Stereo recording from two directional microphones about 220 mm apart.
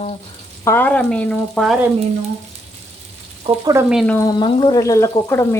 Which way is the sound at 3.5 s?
30° right (ahead or behind).